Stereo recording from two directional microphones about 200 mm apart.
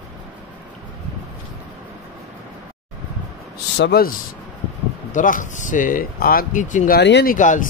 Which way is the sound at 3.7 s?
55° left (ahead or behind).